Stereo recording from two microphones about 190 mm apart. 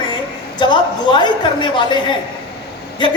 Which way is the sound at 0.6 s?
25° left (ahead or behind).